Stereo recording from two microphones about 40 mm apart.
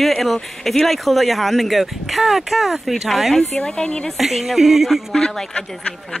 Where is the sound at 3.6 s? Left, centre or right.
Left.